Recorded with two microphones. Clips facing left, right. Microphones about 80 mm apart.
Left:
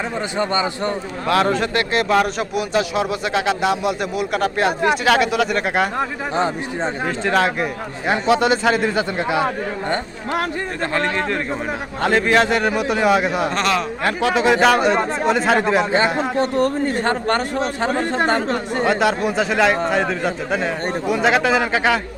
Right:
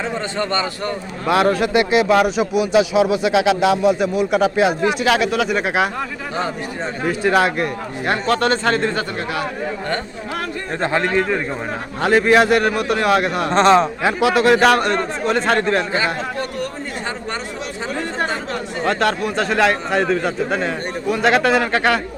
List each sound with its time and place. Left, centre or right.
0.3 s a man's voice: centre
1.3 s a man's voice: centre
6.0 s speech: left
7.1 s a man's voice: centre
9.1 s speech: left
11.0 s a man's voice: centre
13.5 s a man's voice: right
14.0 s a man's voice: centre
16.6 s speech: left
18.9 s a man's voice: centre